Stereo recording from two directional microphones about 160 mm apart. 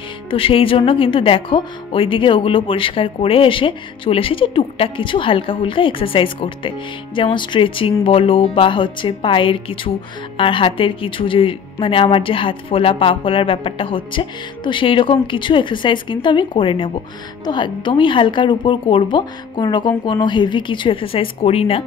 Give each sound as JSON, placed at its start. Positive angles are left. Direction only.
{"t": 0.3, "sound": "a woman's voice", "side_deg": 35}